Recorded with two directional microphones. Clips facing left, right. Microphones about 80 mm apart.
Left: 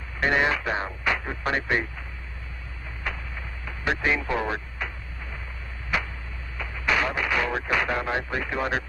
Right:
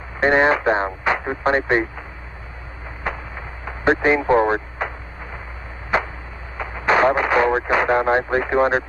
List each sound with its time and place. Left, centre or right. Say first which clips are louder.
0.2 s speech: right 7 dB; right
3.0 s a sound: right 6 dB; right
5.9 s chop: right 7 dB; right
6.6 s radio: right 9 dB; right